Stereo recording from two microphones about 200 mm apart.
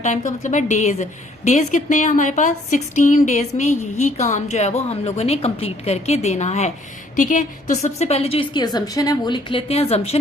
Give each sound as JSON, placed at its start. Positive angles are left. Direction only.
{"t": 0.0, "sound": "a woman's voice", "side_deg": 35}